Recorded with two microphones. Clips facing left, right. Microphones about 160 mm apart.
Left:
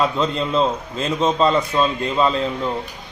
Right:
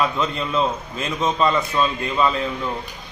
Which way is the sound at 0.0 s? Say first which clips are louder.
Left 2 dB; 25° left (ahead or behind).